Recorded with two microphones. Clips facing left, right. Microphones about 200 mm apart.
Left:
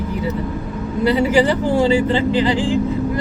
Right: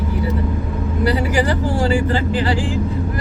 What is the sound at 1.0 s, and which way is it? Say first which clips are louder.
Speech: left 4 dB; 20° left (ahead or behind).